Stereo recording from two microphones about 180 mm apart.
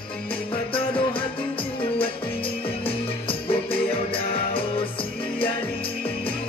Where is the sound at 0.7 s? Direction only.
30° left (ahead or behind).